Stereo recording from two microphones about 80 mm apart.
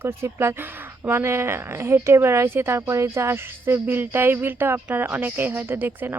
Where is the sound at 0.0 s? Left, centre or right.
Right.